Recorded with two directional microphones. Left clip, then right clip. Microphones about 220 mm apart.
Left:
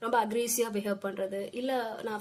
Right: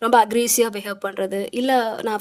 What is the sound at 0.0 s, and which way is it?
A woman's voice, 45° right (ahead or behind).